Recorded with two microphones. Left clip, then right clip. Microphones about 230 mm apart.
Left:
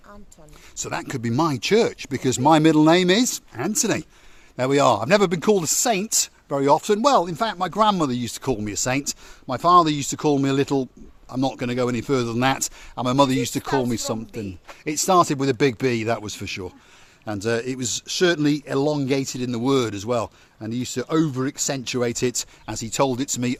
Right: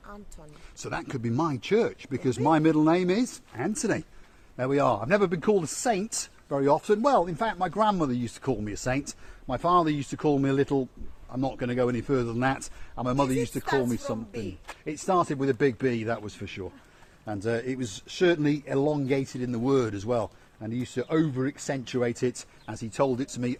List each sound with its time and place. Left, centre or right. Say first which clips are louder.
0.8 s a man's voice: left 5 dB; left